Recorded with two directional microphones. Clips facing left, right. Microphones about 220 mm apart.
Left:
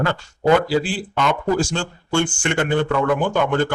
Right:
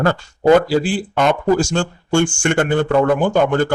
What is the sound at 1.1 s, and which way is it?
Speech, 45° right (ahead or behind).